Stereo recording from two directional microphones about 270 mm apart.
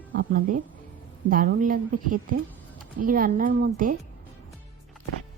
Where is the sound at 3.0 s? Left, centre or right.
Right.